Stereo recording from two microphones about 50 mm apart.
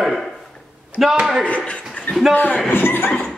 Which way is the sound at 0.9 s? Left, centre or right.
Left.